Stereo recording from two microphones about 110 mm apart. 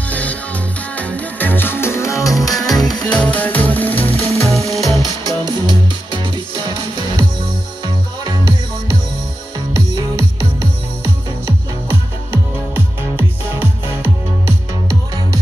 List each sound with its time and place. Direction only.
0.1 s music: 15° left (ahead or behind); by 2.5 s 30° left (ahead or behind)
2.5 s music: 5° left (ahead or behind); by 4.7 s 25° left (ahead or behind)
5.2 s music: 40° right (ahead or behind)
7.8 s music: 40° right (ahead or behind)
9.8 s music: 30° right (ahead or behind)
13.6 s music: 25° right (ahead or behind)